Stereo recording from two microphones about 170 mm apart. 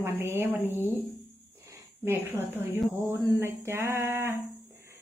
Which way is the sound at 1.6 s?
15° right (ahead or behind).